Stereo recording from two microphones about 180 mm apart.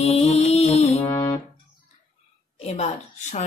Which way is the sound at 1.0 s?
20° left (ahead or behind).